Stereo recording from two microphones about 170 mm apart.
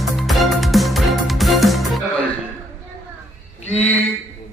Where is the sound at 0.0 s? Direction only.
Centre (ahead or behind).